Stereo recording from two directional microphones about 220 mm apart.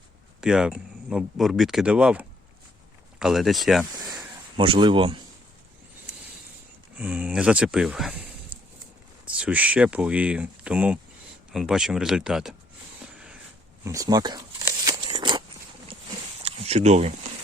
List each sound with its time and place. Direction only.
0.4 s speech: 5° right (ahead or behind)
4.2 s a sound: 25° right (ahead or behind)
6.9 s speech: 5° right (ahead or behind)
9.4 s speech: 5° right (ahead or behind)
13.8 s speech: 15° right (ahead or behind)
14.8 s scissors: 15° right (ahead or behind)
16.4 s a sound: 25° right (ahead or behind)